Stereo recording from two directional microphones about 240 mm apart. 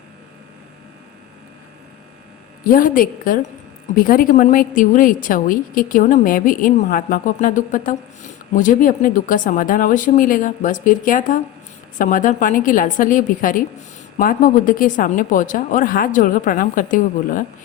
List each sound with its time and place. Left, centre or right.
2.6 s a woman's voice: left